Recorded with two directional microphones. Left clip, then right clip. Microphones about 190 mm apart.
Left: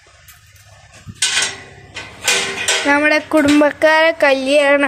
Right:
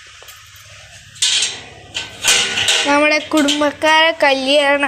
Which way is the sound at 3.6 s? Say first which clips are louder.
Left 1 dB; 25° left (ahead or behind).